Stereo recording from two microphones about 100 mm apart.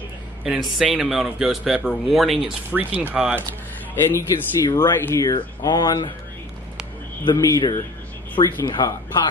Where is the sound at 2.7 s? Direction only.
15° right (ahead or behind).